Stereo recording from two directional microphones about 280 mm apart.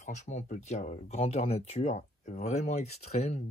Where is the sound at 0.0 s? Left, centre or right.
Left.